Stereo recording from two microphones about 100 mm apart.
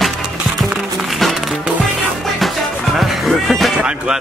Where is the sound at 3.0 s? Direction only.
Centre (ahead or behind).